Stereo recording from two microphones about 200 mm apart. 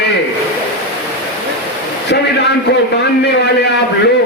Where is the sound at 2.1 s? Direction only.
60° left (ahead or behind).